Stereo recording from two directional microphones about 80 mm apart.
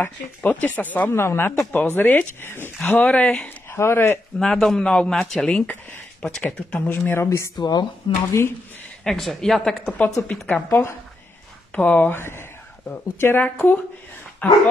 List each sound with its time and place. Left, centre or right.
0.0 s speech: left
3.4 s speech: left
4.4 s a man's voice: centre
6.7 s speech: left
7.2 s speech: left
7.5 s speech: left
8.0 s speech: left
9.0 s a woman's voice: centre
10.7 s speech: left
11.7 s speech: left